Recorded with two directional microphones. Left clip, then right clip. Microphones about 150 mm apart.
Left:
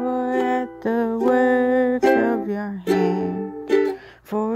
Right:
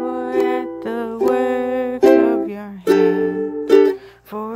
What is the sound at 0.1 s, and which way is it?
Music, 35° left (ahead or behind).